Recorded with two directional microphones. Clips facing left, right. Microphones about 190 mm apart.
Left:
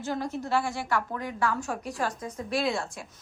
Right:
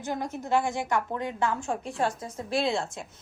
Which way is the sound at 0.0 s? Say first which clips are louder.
Left 1 dB; 20° right (ahead or behind).